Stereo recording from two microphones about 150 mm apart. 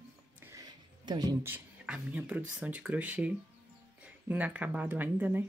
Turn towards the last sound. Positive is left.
turn(degrees=-10)  # may be behind; listen again after turning